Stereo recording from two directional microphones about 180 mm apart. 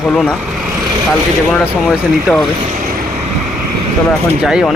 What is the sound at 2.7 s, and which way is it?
Vehicle, 50° right (ahead or behind).